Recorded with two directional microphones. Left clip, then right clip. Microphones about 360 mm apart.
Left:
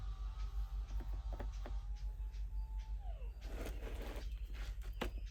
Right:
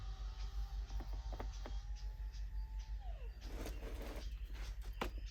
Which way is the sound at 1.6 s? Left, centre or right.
Centre.